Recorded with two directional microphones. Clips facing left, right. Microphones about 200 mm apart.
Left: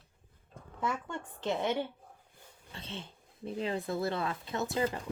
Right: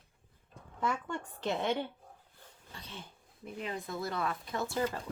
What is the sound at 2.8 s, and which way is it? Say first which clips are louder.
A woman's voice: left 5 dB; 25° left (ahead or behind).